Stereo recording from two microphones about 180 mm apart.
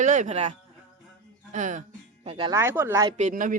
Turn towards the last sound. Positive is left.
turn(degrees=-45)  # may be behind; listen again after turning